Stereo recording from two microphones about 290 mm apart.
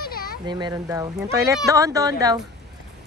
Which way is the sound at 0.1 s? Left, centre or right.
Left.